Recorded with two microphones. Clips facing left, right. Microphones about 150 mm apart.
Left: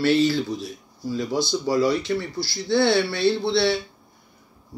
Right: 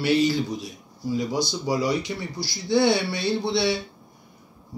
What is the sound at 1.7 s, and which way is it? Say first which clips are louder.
Speech: left 4 dB; 15° right (ahead or behind).